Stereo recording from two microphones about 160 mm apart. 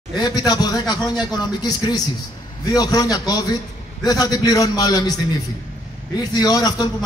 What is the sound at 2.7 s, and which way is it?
A man's voice, 25° left (ahead or behind).